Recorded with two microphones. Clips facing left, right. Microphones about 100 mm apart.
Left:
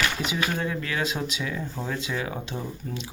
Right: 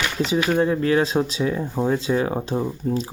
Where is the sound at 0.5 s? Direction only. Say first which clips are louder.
Right 10 dB; 35° right (ahead or behind).